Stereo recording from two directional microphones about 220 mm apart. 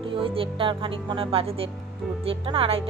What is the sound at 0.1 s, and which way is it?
Speech, 25° right (ahead or behind).